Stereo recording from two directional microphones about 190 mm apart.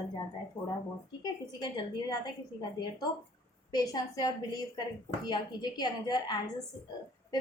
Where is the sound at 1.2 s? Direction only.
20° left (ahead or behind).